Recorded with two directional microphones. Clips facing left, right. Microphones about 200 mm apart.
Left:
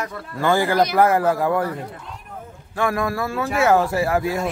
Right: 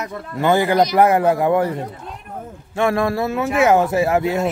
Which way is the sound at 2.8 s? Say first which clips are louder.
Right 4 dB; 25° right (ahead or behind).